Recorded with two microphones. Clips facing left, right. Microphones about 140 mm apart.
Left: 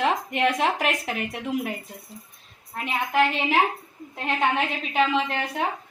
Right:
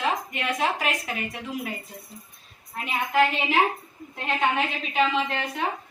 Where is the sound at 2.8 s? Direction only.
20° left (ahead or behind).